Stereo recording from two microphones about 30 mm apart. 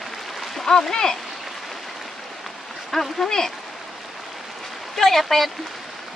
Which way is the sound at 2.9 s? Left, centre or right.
Centre.